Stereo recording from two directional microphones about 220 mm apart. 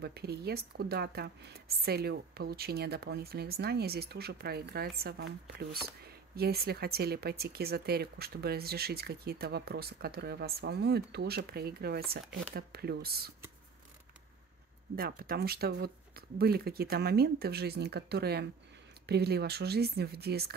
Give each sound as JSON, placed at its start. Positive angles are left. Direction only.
{"t": 0.0, "sound": "speech", "side_deg": -45}
{"t": 15.0, "sound": "speech", "side_deg": -45}